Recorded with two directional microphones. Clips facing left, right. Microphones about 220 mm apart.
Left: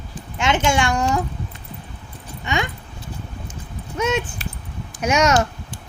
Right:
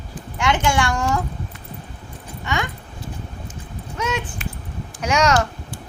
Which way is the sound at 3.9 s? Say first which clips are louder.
Left 4 dB; 25° left (ahead or behind).